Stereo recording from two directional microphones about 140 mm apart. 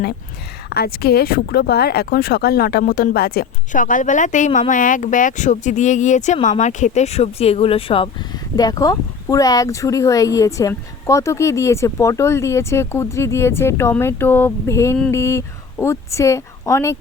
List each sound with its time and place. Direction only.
0.8 s speech: 90° left; by 8.1 s 40° left (ahead or behind)
8.5 s a woman's voice: 25° left (ahead or behind)